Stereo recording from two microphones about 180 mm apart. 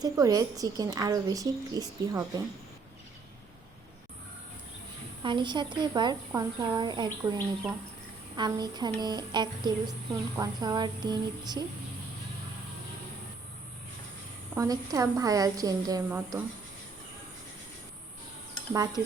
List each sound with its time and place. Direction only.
0.0 s a woman's voice: 20° right (ahead or behind)
5.2 s a woman's voice: 25° right (ahead or behind)
14.5 s a woman's voice: 20° right (ahead or behind)
18.7 s a woman's voice: 20° right (ahead or behind)